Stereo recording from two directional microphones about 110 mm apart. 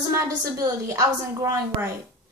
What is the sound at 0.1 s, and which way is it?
A woman's voice, 30° right (ahead or behind).